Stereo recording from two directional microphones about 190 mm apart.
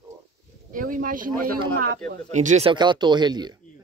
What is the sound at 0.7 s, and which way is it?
Speech, 45° right (ahead or behind).